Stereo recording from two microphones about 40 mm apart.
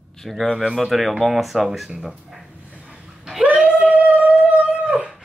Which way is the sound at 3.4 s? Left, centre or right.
Right.